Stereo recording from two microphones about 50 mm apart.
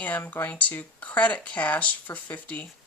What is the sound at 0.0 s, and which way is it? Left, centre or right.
Speech, left.